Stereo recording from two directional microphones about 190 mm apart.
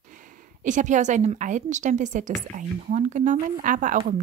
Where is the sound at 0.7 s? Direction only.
40° right (ahead or behind).